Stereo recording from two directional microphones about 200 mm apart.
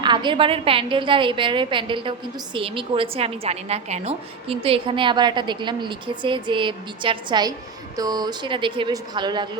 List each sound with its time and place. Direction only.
0.0 s a woman's voice: 20° right (ahead or behind)